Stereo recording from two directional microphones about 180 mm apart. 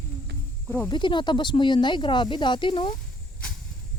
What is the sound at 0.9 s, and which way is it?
Speech, 25° left (ahead or behind).